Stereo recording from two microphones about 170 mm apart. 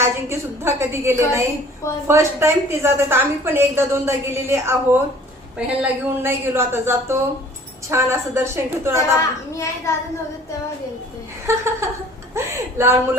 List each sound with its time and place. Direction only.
0.0 s a woman's voice: 15° right (ahead or behind)
9.1 s a child's voice: 20° left (ahead or behind)
11.4 s a woman's voice: 15° right (ahead or behind)